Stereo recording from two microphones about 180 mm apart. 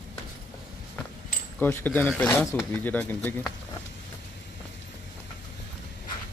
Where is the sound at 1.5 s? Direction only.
10° left (ahead or behind).